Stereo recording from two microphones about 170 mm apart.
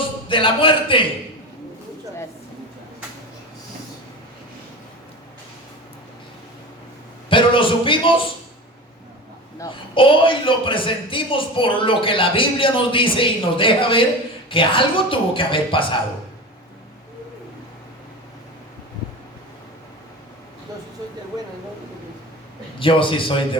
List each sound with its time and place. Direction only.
0.3 s speech: 30° left (ahead or behind)
7.3 s a man's voice: 30° left (ahead or behind)
9.6 s speech: 30° left (ahead or behind)
22.8 s speech: 30° left (ahead or behind)